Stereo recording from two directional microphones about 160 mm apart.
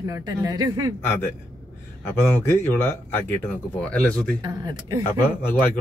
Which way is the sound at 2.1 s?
15° left (ahead or behind).